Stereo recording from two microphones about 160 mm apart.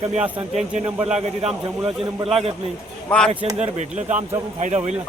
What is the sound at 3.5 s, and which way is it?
Speech, 45° right (ahead or behind).